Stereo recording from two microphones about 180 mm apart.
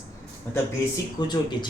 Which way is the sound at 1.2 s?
25° left (ahead or behind).